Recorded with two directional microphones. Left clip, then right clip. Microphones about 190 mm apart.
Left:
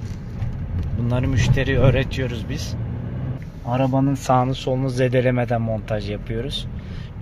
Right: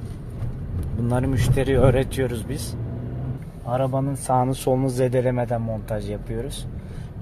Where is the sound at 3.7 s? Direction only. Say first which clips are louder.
Left 3 dB; 40° left (ahead or behind).